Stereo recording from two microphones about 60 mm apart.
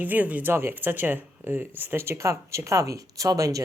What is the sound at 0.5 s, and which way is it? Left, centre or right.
Speech, right.